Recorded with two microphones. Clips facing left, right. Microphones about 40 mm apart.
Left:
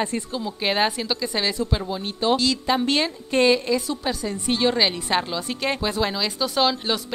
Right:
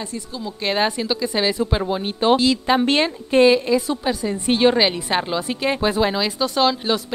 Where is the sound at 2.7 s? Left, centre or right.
Right.